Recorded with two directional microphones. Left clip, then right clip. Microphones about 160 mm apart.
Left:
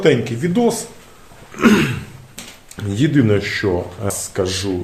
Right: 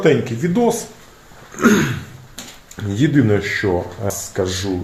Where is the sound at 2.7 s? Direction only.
5° right (ahead or behind).